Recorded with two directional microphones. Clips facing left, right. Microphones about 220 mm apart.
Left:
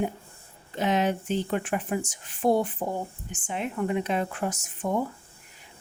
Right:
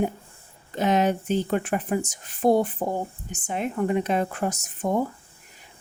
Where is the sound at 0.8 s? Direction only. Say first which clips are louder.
Right 3 dB; 45° right (ahead or behind).